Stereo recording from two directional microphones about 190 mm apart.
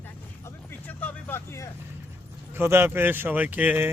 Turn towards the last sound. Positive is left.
turn(degrees=-10)  # may be behind; listen again after turning